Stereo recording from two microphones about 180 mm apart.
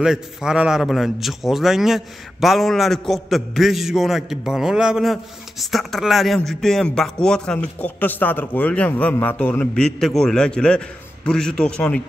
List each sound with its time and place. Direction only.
0.0 s a man's voice: 5° right (ahead or behind)